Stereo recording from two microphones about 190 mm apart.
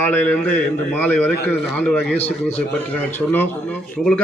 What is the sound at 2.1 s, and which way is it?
Speech, 35° left (ahead or behind).